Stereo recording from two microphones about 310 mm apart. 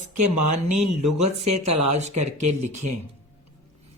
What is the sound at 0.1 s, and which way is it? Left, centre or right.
Speech, right.